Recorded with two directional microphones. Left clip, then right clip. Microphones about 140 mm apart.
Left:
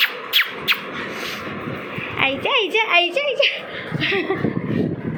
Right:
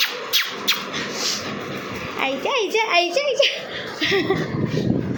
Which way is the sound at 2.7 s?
25° right (ahead or behind).